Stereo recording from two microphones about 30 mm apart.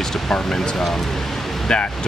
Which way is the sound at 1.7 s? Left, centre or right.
Left.